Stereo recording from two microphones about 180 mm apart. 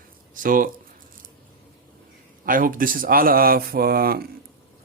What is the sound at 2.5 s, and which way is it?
Speech, 50° right (ahead or behind).